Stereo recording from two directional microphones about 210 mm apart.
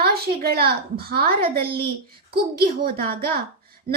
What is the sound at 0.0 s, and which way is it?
A woman's voice, 50° right (ahead or behind).